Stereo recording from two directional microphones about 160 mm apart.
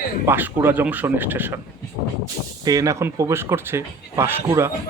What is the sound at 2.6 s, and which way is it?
Speech, 20° right (ahead or behind).